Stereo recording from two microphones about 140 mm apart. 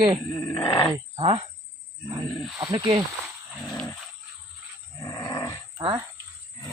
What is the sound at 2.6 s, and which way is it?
Speech, 35° right (ahead or behind).